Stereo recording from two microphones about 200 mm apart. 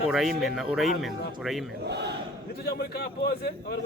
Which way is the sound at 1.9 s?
55° right (ahead or behind).